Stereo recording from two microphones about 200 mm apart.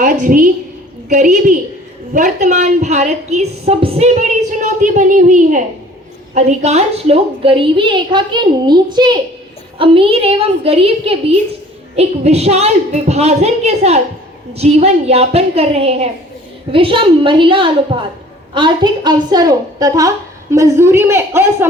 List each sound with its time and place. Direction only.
0.0 s a woman's voice: 40° right (ahead or behind); by 21.7 s 10° right (ahead or behind)